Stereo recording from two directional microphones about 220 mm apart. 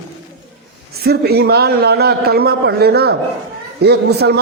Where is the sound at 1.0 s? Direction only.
45° right (ahead or behind).